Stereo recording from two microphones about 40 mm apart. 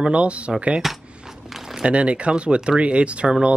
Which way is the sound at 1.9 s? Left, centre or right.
Right.